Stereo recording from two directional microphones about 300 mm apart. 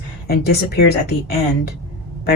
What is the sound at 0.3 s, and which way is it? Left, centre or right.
Speech, left.